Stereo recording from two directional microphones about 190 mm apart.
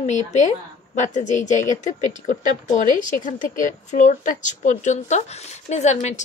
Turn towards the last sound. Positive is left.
turn(degrees=35)  # may be behind; listen again after turning